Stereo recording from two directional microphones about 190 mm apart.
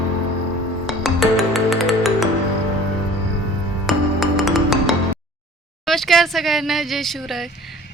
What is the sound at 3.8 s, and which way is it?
Music, centre (ahead or behind).